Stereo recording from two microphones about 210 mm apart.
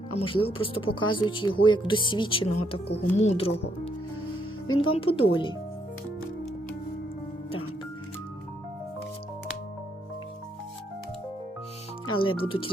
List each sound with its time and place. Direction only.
0.2 s speech: 25° left (ahead or behind)
12.0 s music: 25° left (ahead or behind)
12.4 s speech: 25° left (ahead or behind)